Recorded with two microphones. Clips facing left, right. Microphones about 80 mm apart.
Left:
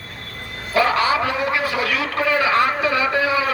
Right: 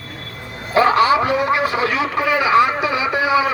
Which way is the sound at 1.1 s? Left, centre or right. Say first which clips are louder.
Right 4 dB; right.